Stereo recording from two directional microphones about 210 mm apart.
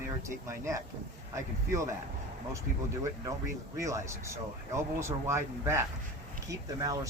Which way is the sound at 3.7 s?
15° right (ahead or behind).